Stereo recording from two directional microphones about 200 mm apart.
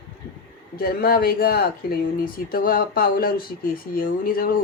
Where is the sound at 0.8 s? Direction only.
50° left (ahead or behind).